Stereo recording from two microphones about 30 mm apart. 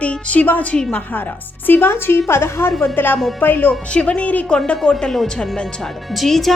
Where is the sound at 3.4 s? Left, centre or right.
Left.